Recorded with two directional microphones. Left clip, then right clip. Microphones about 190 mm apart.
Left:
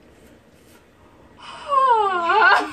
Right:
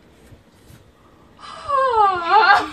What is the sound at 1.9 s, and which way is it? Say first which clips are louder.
Wail: right 3 dB; 10° left (ahead or behind).